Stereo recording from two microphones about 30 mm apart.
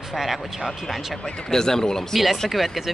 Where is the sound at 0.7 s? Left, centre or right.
Centre.